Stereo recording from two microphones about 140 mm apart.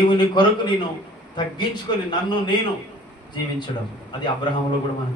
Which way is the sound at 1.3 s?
35° left (ahead or behind).